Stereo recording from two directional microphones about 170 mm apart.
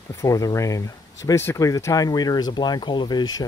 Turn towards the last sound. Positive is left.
turn(degrees=25)  # may be behind; listen again after turning